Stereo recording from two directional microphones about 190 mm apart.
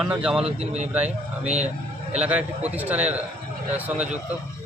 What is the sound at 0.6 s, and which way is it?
Speech, 35° right (ahead or behind).